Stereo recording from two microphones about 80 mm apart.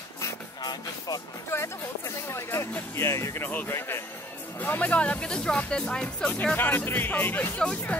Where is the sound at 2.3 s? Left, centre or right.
Left.